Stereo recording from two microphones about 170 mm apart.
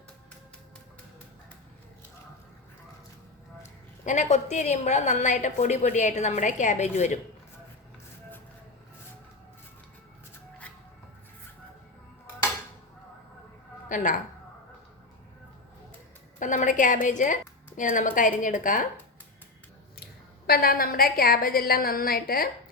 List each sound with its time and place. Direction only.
4.0 s a woman's voice: 45° left (ahead or behind)
13.8 s a woman's voice: 50° left (ahead or behind)
16.4 s a woman's voice: 50° left (ahead or behind)
20.5 s a woman's voice: 60° left (ahead or behind)